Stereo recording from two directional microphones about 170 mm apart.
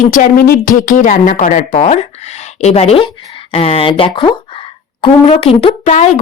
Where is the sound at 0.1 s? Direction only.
55° left (ahead or behind).